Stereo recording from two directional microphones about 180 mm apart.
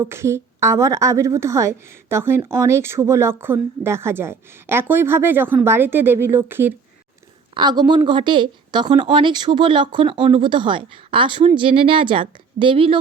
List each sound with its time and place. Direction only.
0.0 s a woman's voice: 15° right (ahead or behind)
7.5 s a woman's voice: 25° right (ahead or behind)